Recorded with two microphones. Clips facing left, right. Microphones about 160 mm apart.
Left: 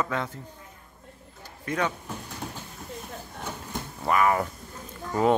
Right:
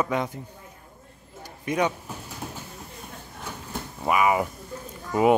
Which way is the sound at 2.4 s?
5° right (ahead or behind).